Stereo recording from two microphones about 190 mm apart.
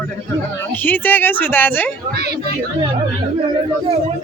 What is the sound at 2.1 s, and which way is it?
Speech, 55° right (ahead or behind).